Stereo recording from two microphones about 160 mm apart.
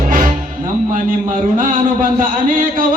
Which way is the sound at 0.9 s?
55° right (ahead or behind).